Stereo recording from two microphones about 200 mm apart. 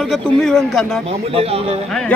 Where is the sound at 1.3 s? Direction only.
30° right (ahead or behind).